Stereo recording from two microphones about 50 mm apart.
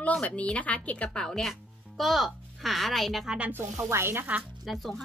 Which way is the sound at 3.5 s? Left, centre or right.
Right.